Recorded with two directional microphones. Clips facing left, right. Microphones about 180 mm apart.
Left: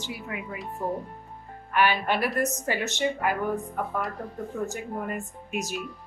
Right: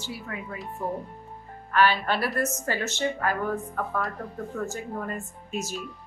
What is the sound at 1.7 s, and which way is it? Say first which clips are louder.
Speech: right 1 dB; 15° left (ahead or behind).